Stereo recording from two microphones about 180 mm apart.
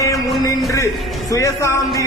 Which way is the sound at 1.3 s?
15° left (ahead or behind).